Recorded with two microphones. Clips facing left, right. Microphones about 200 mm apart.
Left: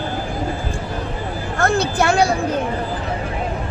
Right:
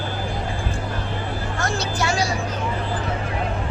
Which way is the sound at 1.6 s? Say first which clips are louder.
Left 8 dB; 55° left (ahead or behind).